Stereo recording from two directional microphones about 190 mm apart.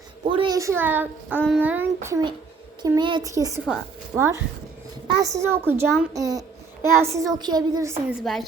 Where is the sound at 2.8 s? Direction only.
25° right (ahead or behind).